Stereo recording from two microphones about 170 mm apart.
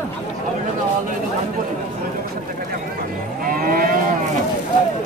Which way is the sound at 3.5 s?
60° right (ahead or behind).